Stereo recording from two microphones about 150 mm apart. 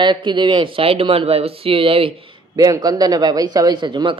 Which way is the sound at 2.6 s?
25° right (ahead or behind).